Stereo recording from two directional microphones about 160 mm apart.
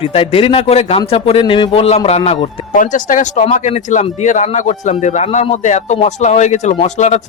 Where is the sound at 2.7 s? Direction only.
55° left (ahead or behind).